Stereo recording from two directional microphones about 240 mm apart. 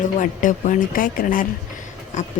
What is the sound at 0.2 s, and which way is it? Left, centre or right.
Speech, left.